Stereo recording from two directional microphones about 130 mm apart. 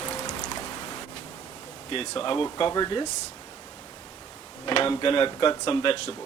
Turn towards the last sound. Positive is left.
turn(degrees=45)  # may be behind; listen again after turning